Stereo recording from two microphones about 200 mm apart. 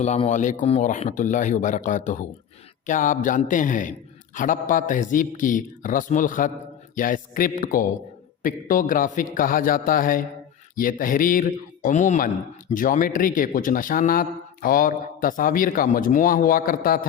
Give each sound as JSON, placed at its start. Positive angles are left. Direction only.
{"t": 0.0, "sound": "a man's voice", "side_deg": 35}